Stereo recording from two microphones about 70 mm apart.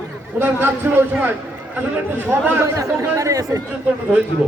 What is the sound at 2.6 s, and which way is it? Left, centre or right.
Speech, right.